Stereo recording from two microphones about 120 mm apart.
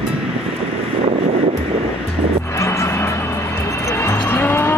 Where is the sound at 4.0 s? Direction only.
20° left (ahead or behind).